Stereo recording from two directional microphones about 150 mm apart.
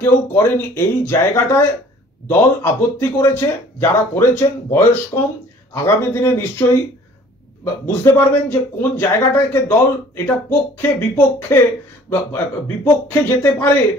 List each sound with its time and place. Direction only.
0.0 s a man's voice: 15° left (ahead or behind)
12.8 s a man's voice: 15° left (ahead or behind)